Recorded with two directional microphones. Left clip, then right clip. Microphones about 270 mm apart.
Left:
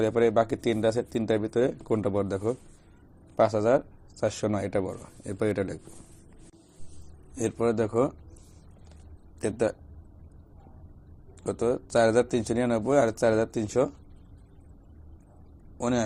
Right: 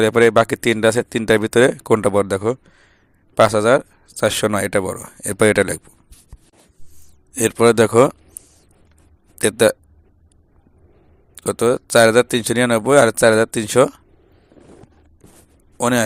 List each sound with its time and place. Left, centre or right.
0.0 s speech: right
7.5 s speech: right
9.4 s speech: right
11.3 s a sound: right
11.7 s speech: right